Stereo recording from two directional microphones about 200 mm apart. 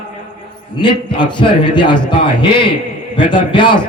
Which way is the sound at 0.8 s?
25° left (ahead or behind).